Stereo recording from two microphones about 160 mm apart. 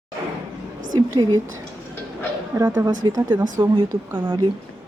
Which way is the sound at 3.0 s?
25° right (ahead or behind).